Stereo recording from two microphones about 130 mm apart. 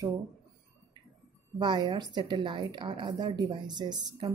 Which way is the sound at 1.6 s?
35° right (ahead or behind).